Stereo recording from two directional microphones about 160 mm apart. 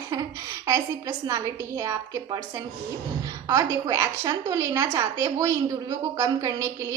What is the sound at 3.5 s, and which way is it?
A woman's voice, 20° right (ahead or behind).